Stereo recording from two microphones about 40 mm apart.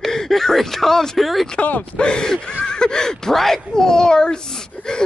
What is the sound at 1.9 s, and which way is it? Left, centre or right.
Speech, left.